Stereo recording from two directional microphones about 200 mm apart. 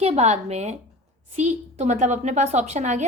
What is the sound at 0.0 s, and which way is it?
A woman's voice, 30° right (ahead or behind).